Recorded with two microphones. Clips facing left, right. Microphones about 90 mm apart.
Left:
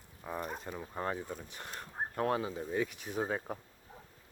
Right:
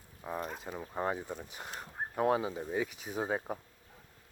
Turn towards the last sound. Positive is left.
turn(degrees=-10)  # may be behind; listen again after turning